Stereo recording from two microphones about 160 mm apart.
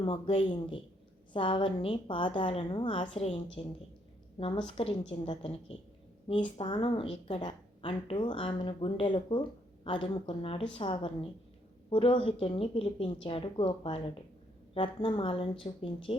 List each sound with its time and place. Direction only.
0.0 s a woman's voice: 35° left (ahead or behind)